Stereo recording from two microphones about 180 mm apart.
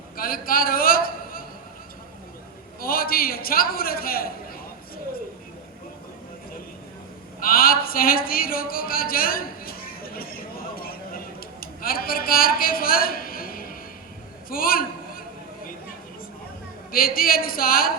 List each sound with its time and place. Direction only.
0.2 s a sound: 55° left (ahead or behind)
2.8 s a man's voice: 55° left (ahead or behind)
7.3 s a man's voice: 55° left (ahead or behind)
10.8 s a sound: 55° left (ahead or behind)
14.5 s a man's voice: 55° left (ahead or behind)
16.9 s a woman's voice: 55° left (ahead or behind)